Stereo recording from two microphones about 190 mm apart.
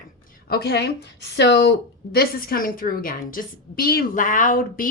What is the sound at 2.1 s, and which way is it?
Speech, 50° left (ahead or behind).